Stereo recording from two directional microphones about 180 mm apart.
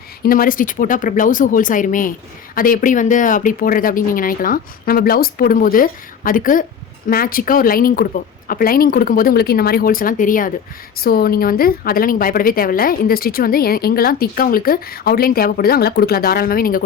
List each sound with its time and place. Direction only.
0.2 s a woman's voice: 50° left (ahead or behind)